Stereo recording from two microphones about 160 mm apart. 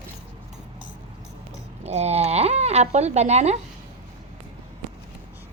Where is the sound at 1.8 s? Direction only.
45° right (ahead or behind).